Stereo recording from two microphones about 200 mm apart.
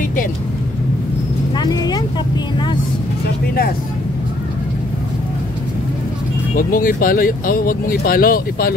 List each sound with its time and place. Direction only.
1.6 s vehicle: 20° left (ahead or behind)
6.5 s speech: 45° left (ahead or behind)